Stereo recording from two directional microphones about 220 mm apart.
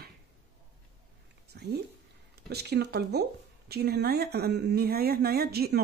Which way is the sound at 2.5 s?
45° right (ahead or behind).